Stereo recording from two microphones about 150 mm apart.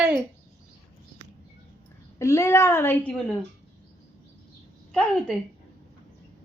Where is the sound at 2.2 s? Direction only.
20° left (ahead or behind).